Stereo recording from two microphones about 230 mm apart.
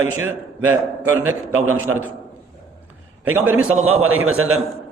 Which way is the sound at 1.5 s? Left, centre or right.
Right.